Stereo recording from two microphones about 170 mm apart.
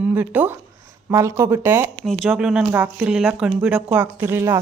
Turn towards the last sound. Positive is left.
turn(degrees=-15)  # may be behind; listen again after turning